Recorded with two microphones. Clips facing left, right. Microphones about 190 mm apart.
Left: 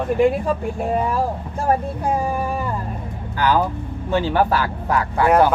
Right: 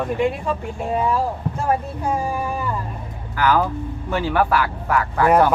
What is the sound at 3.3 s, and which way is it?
Speech, 30° left (ahead or behind).